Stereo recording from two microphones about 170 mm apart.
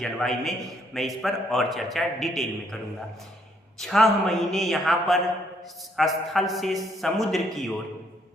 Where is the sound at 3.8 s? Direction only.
Centre (ahead or behind).